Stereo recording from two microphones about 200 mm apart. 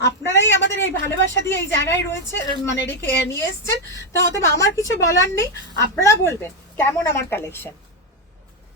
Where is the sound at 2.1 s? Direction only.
60° left (ahead or behind).